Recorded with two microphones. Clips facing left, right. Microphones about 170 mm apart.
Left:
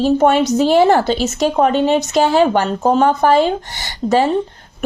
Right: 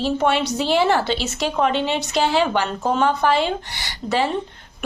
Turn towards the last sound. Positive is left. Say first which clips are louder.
# left 7 dB
turn(degrees=45)  # may be behind; listen again after turning